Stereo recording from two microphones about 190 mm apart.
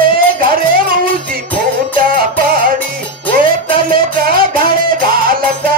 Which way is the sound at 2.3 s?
50° right (ahead or behind).